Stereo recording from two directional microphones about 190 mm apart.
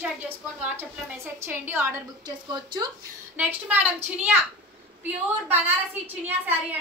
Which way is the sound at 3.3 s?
10° right (ahead or behind).